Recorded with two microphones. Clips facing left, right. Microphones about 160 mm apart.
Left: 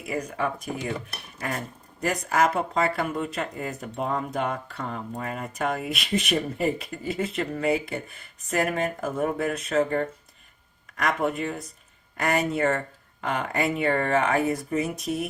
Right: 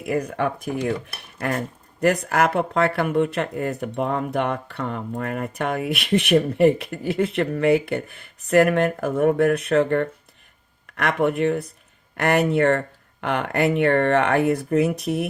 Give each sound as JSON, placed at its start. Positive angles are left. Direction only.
{"t": 0.0, "sound": "speech", "side_deg": -60}